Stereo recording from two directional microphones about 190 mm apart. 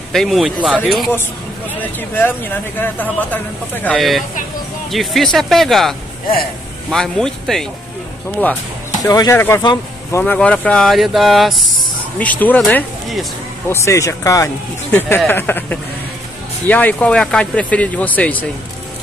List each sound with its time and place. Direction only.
0.1 s speech: centre (ahead or behind)
1.8 s speech: 10° left (ahead or behind)
9.0 s speech: 15° left (ahead or behind)
10.2 s speech: 5° left (ahead or behind)
13.7 s speech: 15° left (ahead or behind)